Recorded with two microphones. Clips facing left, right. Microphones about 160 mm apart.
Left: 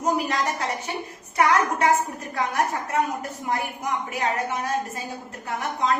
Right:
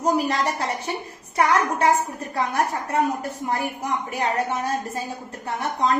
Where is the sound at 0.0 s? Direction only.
35° right (ahead or behind).